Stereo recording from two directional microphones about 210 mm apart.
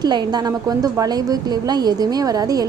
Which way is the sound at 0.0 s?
20° right (ahead or behind).